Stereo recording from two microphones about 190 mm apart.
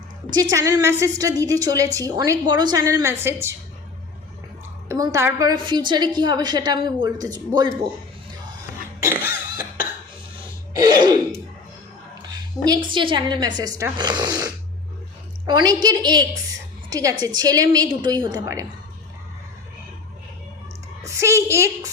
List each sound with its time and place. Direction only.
0.5 s a woman's voice: 15° right (ahead or behind)
4.9 s a woman's voice: 15° right (ahead or behind)
9.0 s cough: 10° right (ahead or behind)
10.8 s throat clearing: 20° right (ahead or behind)
12.6 s a woman's voice: 20° right (ahead or behind)
21.0 s a woman's voice: 15° right (ahead or behind)